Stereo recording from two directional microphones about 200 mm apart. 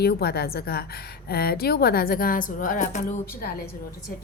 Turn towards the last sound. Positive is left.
turn(degrees=50)  # may be behind; listen again after turning